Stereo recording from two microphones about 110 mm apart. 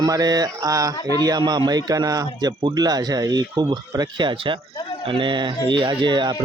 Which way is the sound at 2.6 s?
50° right (ahead or behind).